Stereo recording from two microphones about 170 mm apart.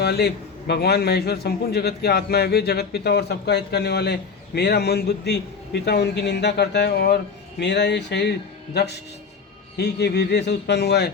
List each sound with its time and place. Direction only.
0.0 s a man's voice: 70° left (ahead or behind)
7.6 s a man's voice: 90° left